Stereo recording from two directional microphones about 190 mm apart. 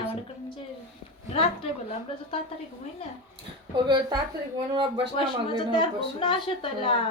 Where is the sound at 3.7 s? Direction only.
25° right (ahead or behind).